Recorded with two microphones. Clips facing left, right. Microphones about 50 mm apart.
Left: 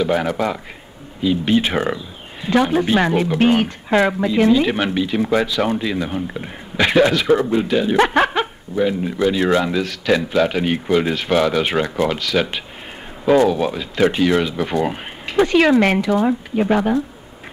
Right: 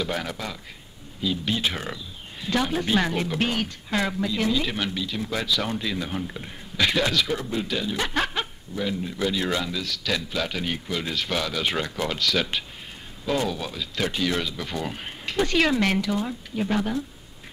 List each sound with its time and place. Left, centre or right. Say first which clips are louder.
0.0 s speech: left 11 dB; left
2.6 s speech: left 6 dB; centre
3.4 s speech: left 11 dB; left
5.4 s speech: left 8 dB; left
7.9 s speech: left 12 dB; left; by 12.6 s centre
13.5 s speech: left 11 dB; left
15.2 s speech: left 8 dB; centre
16.2 s speech: left 10 dB; left